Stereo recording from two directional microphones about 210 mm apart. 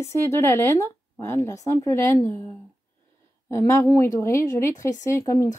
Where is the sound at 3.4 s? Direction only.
15° left (ahead or behind).